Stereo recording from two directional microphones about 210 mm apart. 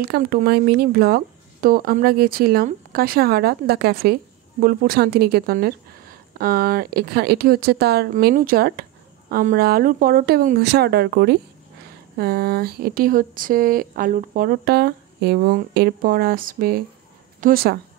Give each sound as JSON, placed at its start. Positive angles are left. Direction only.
{"t": 0.0, "sound": "speech", "side_deg": -45}